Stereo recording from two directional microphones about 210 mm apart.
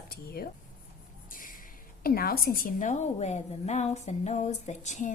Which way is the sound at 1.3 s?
40° left (ahead or behind).